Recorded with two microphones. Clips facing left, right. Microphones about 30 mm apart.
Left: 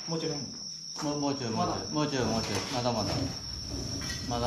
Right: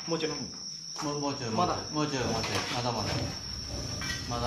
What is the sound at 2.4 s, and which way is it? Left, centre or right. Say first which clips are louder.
Speech: right 1 dB; right.